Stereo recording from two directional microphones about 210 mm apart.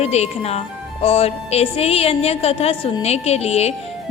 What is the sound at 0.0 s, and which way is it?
A woman's voice, 30° left (ahead or behind).